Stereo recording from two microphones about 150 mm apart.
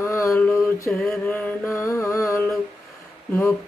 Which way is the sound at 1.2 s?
10° left (ahead or behind).